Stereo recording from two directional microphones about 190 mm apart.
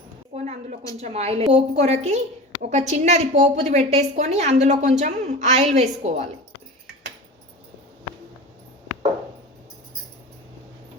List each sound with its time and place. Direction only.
0.3 s a woman's voice: 35° right (ahead or behind)